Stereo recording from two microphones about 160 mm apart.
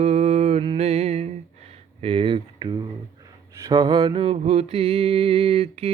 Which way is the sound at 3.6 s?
25° right (ahead or behind).